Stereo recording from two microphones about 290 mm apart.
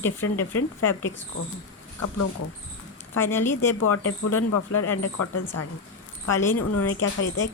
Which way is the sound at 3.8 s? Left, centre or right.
Left.